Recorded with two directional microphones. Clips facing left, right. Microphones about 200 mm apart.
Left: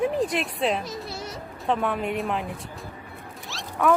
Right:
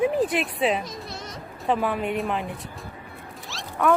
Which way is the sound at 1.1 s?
10° left (ahead or behind).